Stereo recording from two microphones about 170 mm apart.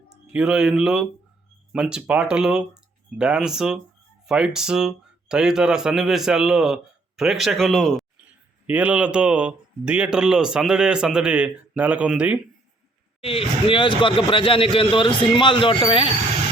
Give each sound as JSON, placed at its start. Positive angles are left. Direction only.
{"t": 0.1, "sound": "speech", "side_deg": -5}
{"t": 8.6, "sound": "speech", "side_deg": -10}
{"t": 13.2, "sound": "speech", "side_deg": 30}